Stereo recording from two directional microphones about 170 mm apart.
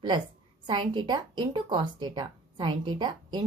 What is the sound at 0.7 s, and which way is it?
Speech, 25° right (ahead or behind).